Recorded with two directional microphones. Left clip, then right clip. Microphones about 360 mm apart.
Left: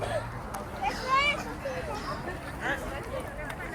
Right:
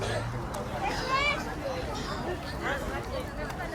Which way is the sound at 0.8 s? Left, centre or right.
Left.